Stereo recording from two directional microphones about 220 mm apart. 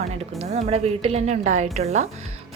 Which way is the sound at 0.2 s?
30° right (ahead or behind).